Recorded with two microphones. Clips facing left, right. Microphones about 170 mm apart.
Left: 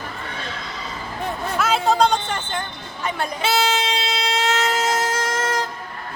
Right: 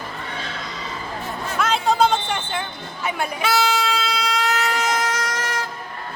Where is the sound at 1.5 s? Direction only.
5° left (ahead or behind).